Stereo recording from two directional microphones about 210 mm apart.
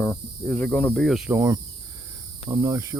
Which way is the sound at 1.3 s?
15° right (ahead or behind).